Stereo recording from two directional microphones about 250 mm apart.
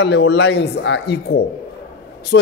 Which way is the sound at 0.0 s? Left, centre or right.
Left.